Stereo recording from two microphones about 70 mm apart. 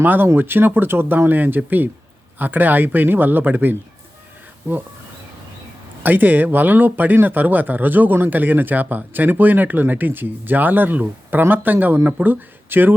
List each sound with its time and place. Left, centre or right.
0.0 s speech: right
6.0 s speech: right